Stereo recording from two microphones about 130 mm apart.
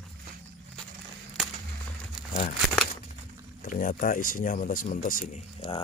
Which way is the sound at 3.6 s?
90° left.